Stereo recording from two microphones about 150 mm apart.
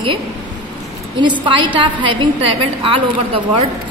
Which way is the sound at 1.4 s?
35° right (ahead or behind).